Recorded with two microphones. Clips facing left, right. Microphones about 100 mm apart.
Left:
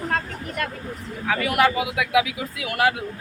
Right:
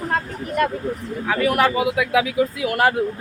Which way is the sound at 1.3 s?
30° right (ahead or behind).